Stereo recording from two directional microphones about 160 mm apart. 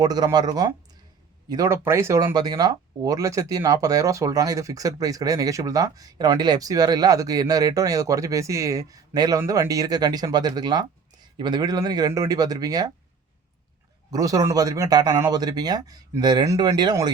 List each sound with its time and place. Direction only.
0.0 s speech: 25° right (ahead or behind)
14.1 s speech: 20° right (ahead or behind)